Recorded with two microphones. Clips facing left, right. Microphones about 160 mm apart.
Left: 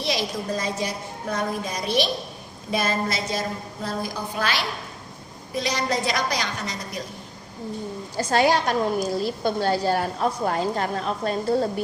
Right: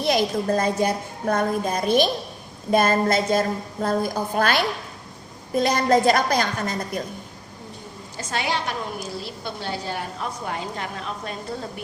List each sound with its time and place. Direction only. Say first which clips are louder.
0.0 s a woman's voice: right 5 dB; 50° right (ahead or behind)
8.1 s a woman's voice: left 7 dB; 35° left (ahead or behind)